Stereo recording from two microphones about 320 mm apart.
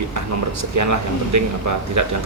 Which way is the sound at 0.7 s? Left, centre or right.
Right.